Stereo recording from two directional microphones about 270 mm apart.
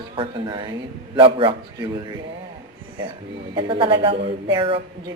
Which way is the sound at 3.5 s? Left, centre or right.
Centre.